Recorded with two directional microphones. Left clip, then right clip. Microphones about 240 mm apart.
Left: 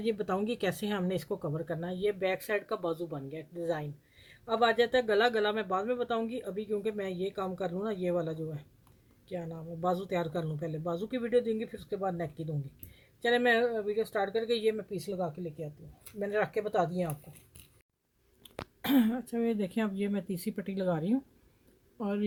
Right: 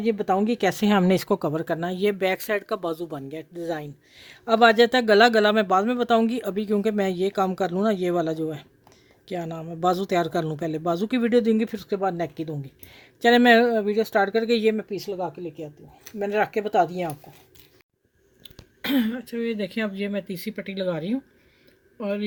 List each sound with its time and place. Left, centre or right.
0.0 s speech: right
16.1 s speech: right
18.8 s speech: centre